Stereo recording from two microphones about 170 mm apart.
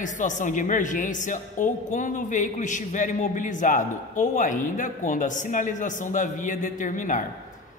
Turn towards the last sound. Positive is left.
turn(degrees=50)  # may be behind; listen again after turning